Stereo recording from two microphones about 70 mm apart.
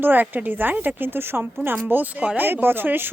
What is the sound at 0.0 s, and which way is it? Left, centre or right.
Speech, right.